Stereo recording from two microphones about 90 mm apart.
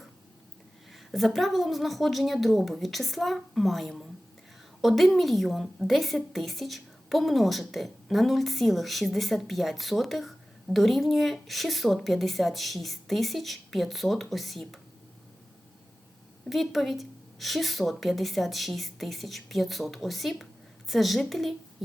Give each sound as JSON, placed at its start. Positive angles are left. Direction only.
{"t": 0.9, "sound": "a woman's voice", "side_deg": 0}
{"t": 16.5, "sound": "a woman's voice", "side_deg": 0}